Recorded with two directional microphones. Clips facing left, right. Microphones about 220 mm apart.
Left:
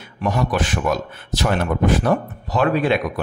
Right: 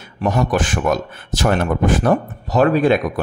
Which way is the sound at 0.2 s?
45° right (ahead or behind).